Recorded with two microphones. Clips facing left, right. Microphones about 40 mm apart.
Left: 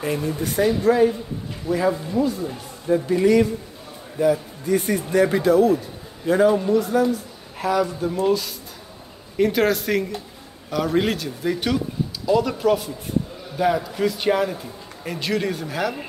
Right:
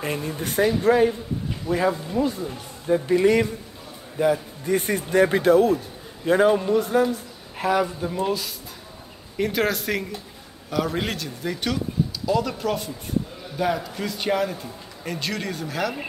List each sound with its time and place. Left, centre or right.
0.0 s a man's voice: right
8.0 s speech: centre
9.4 s speech: centre